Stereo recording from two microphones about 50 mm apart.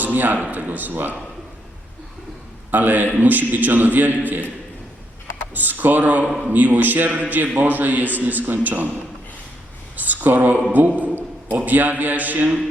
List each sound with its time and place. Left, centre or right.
0.0 s a man's voice: right
2.7 s a man's voice: right
5.5 s a man's voice: right
10.0 s a man's voice: right